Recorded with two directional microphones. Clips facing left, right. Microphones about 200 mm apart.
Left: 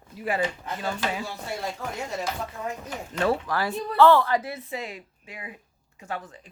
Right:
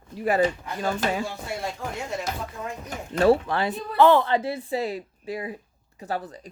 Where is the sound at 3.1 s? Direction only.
30° right (ahead or behind).